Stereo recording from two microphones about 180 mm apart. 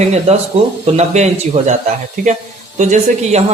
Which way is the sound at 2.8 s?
40° right (ahead or behind).